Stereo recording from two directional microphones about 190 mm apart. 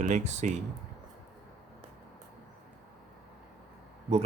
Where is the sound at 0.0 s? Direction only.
40° right (ahead or behind).